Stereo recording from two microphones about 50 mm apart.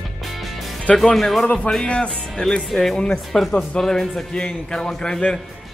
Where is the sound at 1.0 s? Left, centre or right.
Centre.